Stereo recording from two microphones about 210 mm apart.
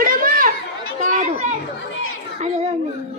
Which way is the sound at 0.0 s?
40° right (ahead or behind).